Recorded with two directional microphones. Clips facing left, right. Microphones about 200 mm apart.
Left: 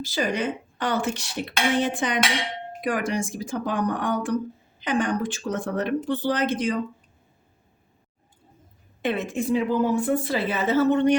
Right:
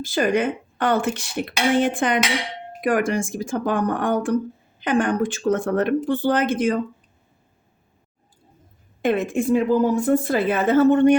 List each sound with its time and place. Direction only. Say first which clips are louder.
0.0 s speech: right 5 dB; 50° right (ahead or behind)
9.0 s speech: right 5 dB; 50° right (ahead or behind)